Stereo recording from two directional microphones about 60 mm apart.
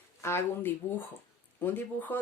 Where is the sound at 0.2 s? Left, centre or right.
Left.